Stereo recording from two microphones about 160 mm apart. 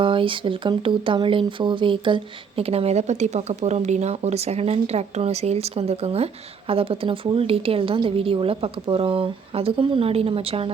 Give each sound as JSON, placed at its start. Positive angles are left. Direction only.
{"t": 0.0, "sound": "speech", "side_deg": -30}